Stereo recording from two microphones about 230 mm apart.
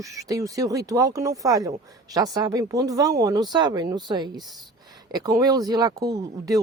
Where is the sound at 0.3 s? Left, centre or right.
Centre.